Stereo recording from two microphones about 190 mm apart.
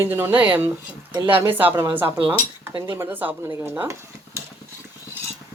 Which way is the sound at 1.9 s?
10° right (ahead or behind).